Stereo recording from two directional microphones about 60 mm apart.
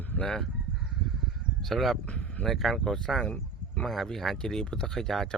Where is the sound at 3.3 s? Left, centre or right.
Left.